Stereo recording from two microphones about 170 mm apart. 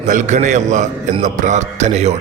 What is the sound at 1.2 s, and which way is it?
Music, 45° right (ahead or behind).